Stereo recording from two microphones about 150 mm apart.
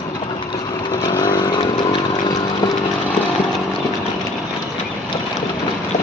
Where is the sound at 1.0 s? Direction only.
30° left (ahead or behind).